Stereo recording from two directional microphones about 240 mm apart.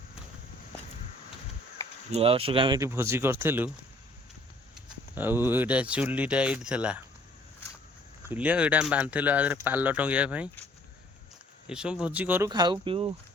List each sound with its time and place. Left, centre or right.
2.0 s speech: right; by 3.7 s centre
4.7 s speech: centre
8.3 s speech: centre
11.7 s speech: centre; by 13.1 s right